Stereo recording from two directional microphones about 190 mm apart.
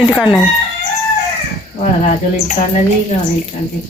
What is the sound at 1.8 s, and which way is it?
Speech, 40° left (ahead or behind).